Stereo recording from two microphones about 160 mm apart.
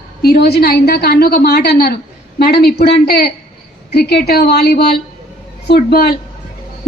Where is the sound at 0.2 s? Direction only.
80° left.